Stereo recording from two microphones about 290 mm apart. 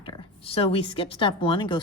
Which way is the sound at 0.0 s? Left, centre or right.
Centre.